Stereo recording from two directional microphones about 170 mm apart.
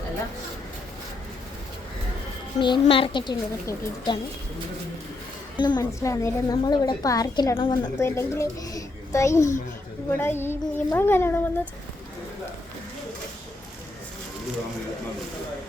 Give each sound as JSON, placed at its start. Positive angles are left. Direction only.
{"t": 2.6, "sound": "a woman's voice", "side_deg": 25}
{"t": 5.5, "sound": "a woman's voice", "side_deg": 25}